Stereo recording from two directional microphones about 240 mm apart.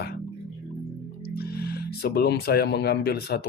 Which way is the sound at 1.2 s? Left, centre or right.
Left.